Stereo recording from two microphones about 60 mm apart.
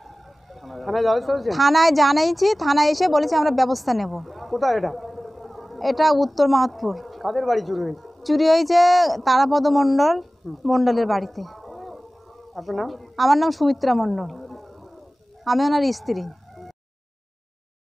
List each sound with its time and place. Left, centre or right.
0.6 s a woman's voice: centre